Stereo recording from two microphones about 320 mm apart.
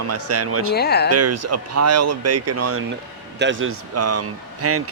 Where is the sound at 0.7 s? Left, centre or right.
Left.